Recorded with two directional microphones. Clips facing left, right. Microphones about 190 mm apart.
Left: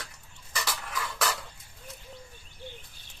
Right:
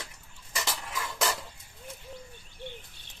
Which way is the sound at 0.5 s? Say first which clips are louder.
Even; 25° right (ahead or behind).